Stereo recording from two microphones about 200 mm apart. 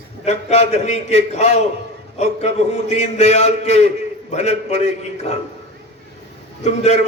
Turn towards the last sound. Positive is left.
turn(degrees=35)  # may be behind; listen again after turning